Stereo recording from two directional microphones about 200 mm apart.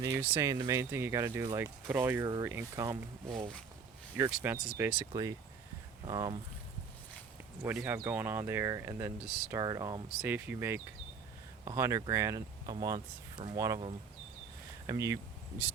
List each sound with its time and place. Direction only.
0.0 s speech: 10° right (ahead or behind)
4.1 s speech: 10° right (ahead or behind)
6.1 s speech: 20° right (ahead or behind)
7.6 s speech: 10° right (ahead or behind)
14.8 s speech: 15° right (ahead or behind)